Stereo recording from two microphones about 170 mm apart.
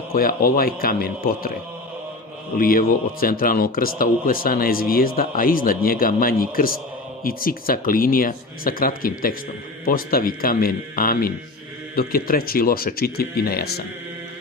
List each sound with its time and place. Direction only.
0.1 s speech: 55° left (ahead or behind)
2.6 s speech: 55° left (ahead or behind)